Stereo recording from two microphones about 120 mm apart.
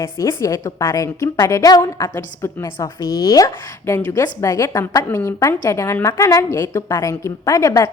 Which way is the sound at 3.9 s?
15° left (ahead or behind).